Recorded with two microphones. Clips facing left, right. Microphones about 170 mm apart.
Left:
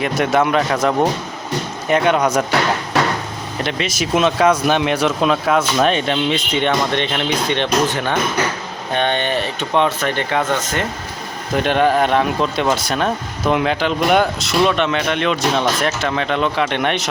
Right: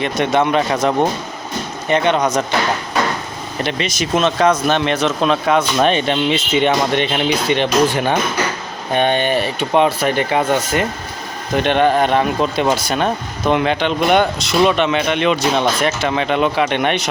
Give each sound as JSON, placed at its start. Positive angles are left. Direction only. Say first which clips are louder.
{"t": 0.0, "sound": "speech", "louder": "even", "side_deg": 5}
{"t": 2.9, "sound": "a sound", "louder": "left 2 dB", "side_deg": 75}
{"t": 3.6, "sound": "speech", "louder": "right 1 dB", "side_deg": 0}
{"t": 11.5, "sound": "speech", "louder": "right 1 dB", "side_deg": 0}